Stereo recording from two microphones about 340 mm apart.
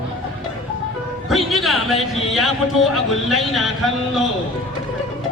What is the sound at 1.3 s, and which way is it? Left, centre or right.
Speech, centre.